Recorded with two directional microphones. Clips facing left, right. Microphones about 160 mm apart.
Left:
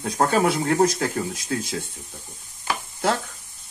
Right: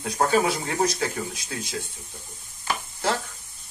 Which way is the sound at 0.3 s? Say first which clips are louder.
Left 4 dB; 55° left (ahead or behind).